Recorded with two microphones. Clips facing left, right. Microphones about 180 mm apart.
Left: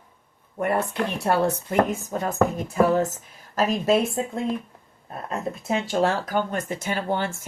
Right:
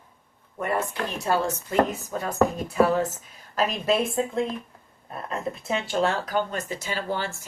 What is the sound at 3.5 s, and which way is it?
Speech, 45° left (ahead or behind).